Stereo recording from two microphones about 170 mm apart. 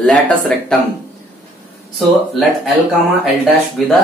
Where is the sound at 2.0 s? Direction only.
Centre (ahead or behind).